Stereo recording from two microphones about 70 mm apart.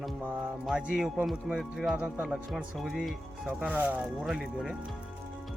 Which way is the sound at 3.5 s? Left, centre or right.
Right.